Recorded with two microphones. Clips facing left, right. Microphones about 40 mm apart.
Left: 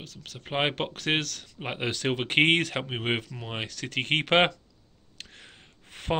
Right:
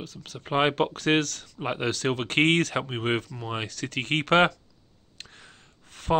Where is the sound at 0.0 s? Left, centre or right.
Centre.